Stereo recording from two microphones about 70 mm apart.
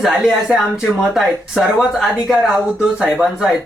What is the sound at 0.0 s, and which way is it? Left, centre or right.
Speech, centre.